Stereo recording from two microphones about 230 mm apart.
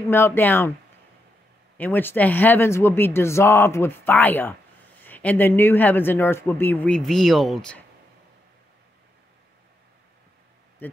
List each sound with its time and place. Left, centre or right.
0.1 s speech: centre
1.8 s speech: centre
10.8 s speech: centre